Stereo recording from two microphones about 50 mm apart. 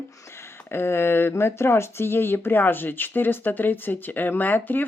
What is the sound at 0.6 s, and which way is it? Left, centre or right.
Speech, left.